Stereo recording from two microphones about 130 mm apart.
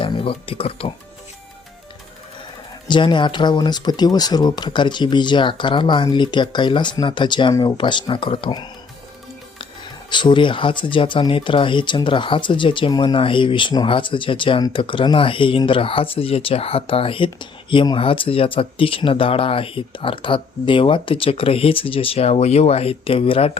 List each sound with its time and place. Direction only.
0.0 s speech: 45° left (ahead or behind)
2.8 s speech: 35° left (ahead or behind)
10.1 s speech: 35° left (ahead or behind)